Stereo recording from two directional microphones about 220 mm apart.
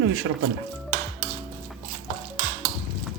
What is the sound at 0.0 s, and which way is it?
Speech, 70° right (ahead or behind).